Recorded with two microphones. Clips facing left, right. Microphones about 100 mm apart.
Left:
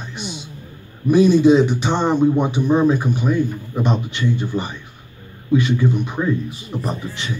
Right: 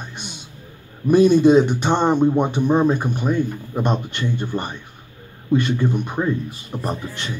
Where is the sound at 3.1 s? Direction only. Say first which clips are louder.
Left 2 dB; 45° right (ahead or behind).